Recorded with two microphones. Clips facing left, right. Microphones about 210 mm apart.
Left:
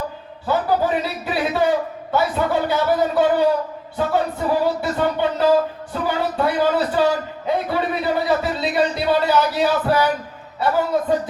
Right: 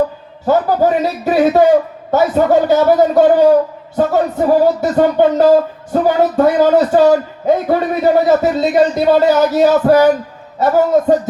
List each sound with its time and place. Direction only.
0.4 s a man's voice: 45° right (ahead or behind)